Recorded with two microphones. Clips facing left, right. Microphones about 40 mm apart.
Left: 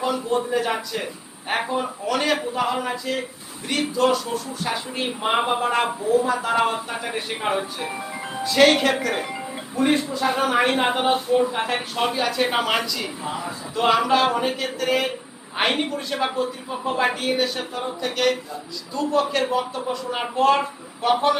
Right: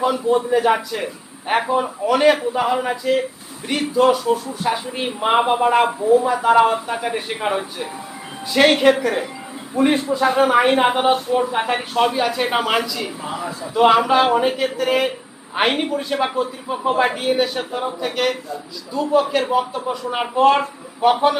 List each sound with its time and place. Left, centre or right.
0.0 s speech: centre
12.0 s speech: centre
17.0 s speech: centre